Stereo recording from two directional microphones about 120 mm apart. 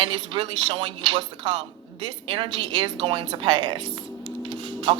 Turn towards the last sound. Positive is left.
turn(degrees=-40)  # may be behind; listen again after turning